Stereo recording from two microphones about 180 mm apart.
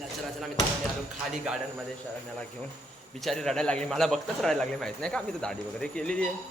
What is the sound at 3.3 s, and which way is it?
A man's voice, 5° left (ahead or behind).